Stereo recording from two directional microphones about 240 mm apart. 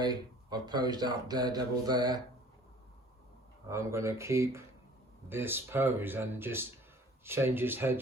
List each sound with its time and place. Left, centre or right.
0.0 s speech: centre
3.7 s speech: centre